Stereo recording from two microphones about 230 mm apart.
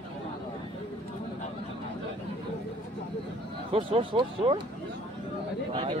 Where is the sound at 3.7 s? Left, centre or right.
Right.